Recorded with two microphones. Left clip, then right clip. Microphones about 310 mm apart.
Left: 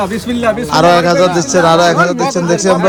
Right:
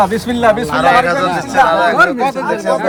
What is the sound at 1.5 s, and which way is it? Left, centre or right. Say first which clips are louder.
Speech: even; centre.